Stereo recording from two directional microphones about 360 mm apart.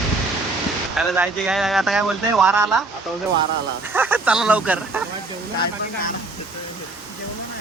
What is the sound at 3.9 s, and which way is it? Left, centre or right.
Speech, centre.